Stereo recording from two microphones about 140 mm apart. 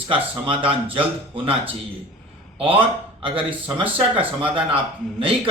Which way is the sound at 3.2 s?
40° right (ahead or behind).